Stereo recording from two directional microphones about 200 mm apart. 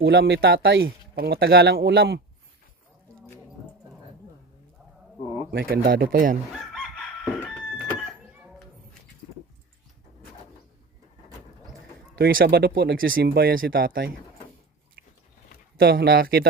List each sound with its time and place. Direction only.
0.0 s speech: 55° right (ahead or behind)
5.5 s speech: 50° right (ahead or behind)
12.1 s speech: 50° right (ahead or behind)
15.8 s speech: 55° right (ahead or behind)